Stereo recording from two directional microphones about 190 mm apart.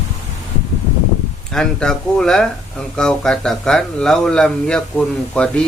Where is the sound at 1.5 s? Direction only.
5° left (ahead or behind).